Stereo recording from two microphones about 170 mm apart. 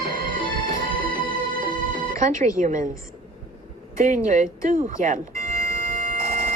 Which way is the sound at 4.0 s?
50° right (ahead or behind).